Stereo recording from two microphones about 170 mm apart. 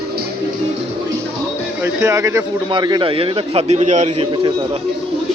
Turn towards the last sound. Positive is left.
turn(degrees=-45)  # may be behind; listen again after turning